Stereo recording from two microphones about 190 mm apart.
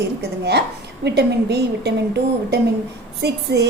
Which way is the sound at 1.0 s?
60° right (ahead or behind).